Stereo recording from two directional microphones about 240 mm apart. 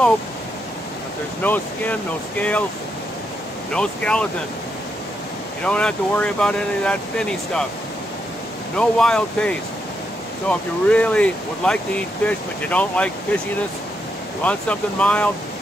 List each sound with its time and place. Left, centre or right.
1.4 s speech: centre
3.7 s speech: centre
5.6 s speech: centre
8.7 s speech: centre
14.4 s speech: centre